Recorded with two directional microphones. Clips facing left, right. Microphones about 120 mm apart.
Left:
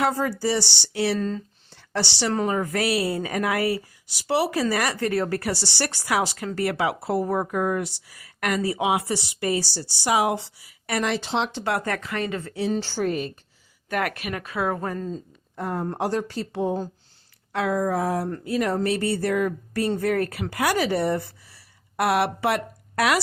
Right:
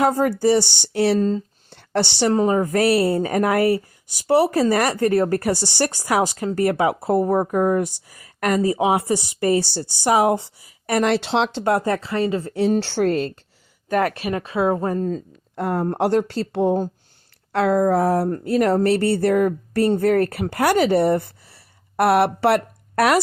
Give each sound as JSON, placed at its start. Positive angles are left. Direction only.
{"t": 0.0, "sound": "speech", "side_deg": -45}
{"t": 1.7, "sound": "a sound", "side_deg": -55}
{"t": 2.3, "sound": "a woman's voice", "side_deg": -30}
{"t": 6.6, "sound": "speech", "side_deg": -45}
{"t": 7.8, "sound": "a woman's voice", "side_deg": -45}
{"t": 11.1, "sound": "speech", "side_deg": -75}
{"t": 11.9, "sound": "a woman's voice", "side_deg": -30}
{"t": 12.5, "sound": "speech", "side_deg": -55}
{"t": 13.9, "sound": "speech", "side_deg": -30}
{"t": 15.1, "sound": "speech", "side_deg": -75}
{"t": 18.3, "sound": "speech", "side_deg": -40}
{"t": 18.6, "sound": "a woman's voice", "side_deg": -65}